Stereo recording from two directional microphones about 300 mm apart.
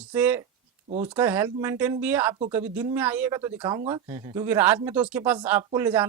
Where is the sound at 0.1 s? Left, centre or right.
Centre.